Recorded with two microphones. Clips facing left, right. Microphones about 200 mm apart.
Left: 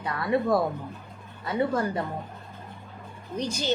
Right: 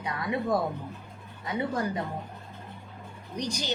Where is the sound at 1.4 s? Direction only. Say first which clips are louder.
Left 4 dB; 15° right (ahead or behind).